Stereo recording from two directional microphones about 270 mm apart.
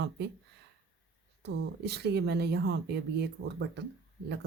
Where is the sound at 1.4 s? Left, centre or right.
Right.